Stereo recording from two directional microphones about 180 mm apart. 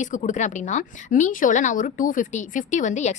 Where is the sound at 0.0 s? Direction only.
45° left (ahead or behind).